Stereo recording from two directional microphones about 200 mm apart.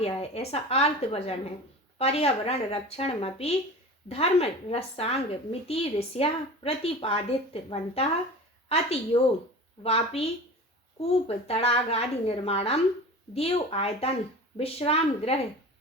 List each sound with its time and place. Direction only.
0.0 s a woman's voice: 30° left (ahead or behind)
9.1 s a woman's voice: 30° left (ahead or behind)